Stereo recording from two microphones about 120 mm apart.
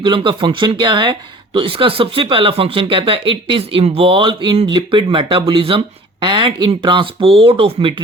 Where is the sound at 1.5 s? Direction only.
50° right (ahead or behind).